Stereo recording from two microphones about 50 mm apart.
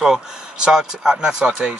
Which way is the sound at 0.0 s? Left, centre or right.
Centre.